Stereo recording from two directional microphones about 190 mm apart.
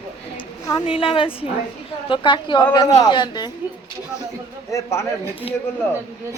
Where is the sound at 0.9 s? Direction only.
25° left (ahead or behind).